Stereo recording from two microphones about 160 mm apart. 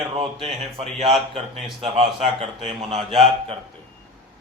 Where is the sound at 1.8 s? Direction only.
40° right (ahead or behind).